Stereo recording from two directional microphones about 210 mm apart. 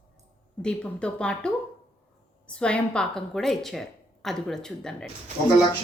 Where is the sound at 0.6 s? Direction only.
5° left (ahead or behind).